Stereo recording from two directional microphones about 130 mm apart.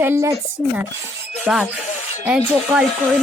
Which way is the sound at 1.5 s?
10° right (ahead or behind).